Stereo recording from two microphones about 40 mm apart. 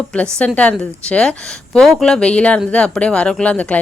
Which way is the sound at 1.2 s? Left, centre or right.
Centre.